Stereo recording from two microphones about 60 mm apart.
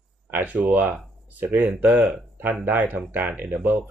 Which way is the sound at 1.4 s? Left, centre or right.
Right.